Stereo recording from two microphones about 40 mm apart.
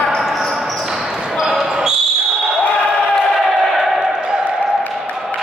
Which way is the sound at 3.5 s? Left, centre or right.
Centre.